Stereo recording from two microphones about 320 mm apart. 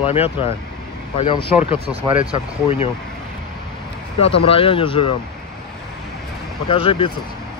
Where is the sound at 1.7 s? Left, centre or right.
Centre.